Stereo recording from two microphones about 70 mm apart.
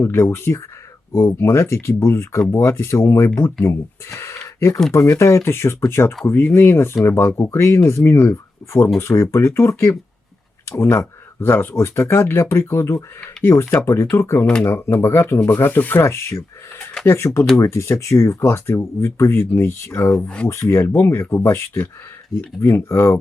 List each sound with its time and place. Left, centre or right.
0.0 s speech: left
3.3 s speech: left
16.0 s speech: left
20.1 s speech: centre
20.5 s speech: left